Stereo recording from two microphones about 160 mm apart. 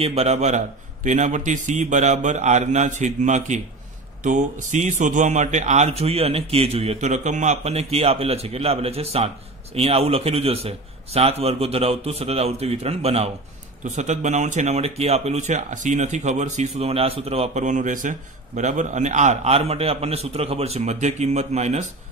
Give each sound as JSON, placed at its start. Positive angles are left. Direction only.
{"t": 0.0, "sound": "a man's voice", "side_deg": -40}